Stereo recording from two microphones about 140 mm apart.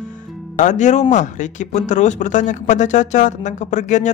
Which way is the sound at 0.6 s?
60° left (ahead or behind).